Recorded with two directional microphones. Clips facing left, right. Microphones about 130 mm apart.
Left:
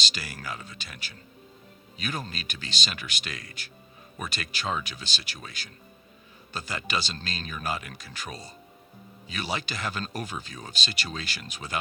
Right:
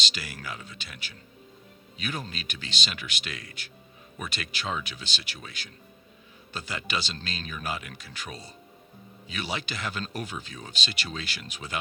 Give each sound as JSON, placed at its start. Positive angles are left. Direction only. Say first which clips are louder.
{"t": 0.0, "sound": "speech", "louder": "left 1 dB", "side_deg": 40}